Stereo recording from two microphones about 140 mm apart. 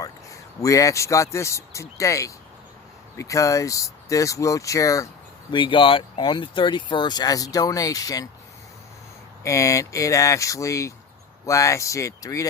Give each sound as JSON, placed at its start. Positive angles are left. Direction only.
{"t": 0.0, "sound": "speech", "side_deg": 25}
{"t": 5.5, "sound": "speech", "side_deg": 35}
{"t": 9.4, "sound": "speech", "side_deg": 20}